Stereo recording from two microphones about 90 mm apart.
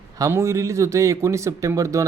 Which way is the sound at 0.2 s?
30° right (ahead or behind).